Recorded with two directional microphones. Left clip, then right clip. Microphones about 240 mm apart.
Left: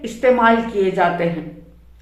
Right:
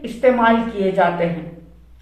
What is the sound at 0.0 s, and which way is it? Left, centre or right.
Speech, left.